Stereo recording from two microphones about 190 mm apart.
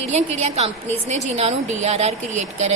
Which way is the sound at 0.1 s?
35° right (ahead or behind).